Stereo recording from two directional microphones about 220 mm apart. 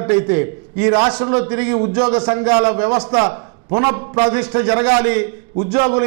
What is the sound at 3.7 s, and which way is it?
Speech, 20° right (ahead or behind).